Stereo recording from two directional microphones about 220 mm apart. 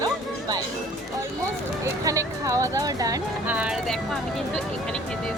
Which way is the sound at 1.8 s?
15° right (ahead or behind).